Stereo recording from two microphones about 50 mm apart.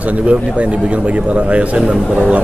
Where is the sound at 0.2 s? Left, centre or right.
Right.